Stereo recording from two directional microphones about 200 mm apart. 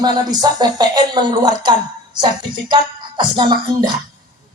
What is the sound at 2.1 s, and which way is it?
Music, 20° right (ahead or behind).